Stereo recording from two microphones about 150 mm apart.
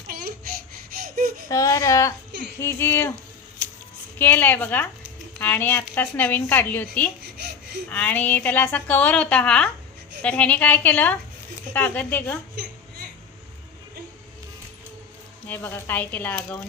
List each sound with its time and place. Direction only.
0.1 s a sound: 75° right (ahead or behind)
1.1 s baby cry: 75° right (ahead or behind)
1.5 s a woman's voice: 20° left (ahead or behind)
4.2 s a woman's voice: 15° left (ahead or behind)
15.4 s a woman's voice: 15° left (ahead or behind)